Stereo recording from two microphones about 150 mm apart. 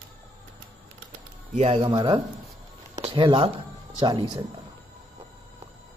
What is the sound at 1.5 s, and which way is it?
Speech, 45° right (ahead or behind).